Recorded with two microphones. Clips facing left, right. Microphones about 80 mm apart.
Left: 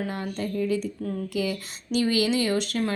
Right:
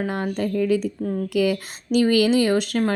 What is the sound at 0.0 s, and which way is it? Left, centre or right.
Speech, right.